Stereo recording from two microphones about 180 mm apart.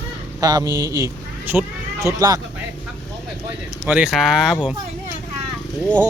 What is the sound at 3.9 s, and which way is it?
Speech, 5° right (ahead or behind).